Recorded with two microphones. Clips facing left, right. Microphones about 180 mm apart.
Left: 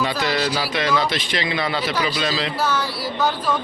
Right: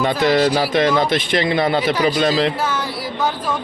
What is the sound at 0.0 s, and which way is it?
Speech, 50° right (ahead or behind).